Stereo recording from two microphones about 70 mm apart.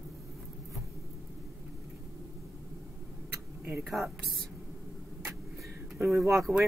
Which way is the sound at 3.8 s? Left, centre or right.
Centre.